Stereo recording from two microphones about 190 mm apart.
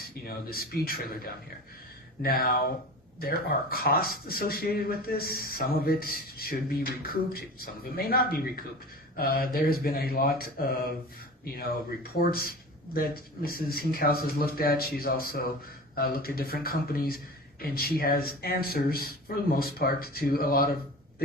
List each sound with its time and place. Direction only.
0.3 s speech: 50° left (ahead or behind)
2.2 s speech: 50° left (ahead or behind)
12.3 s speech: 50° left (ahead or behind)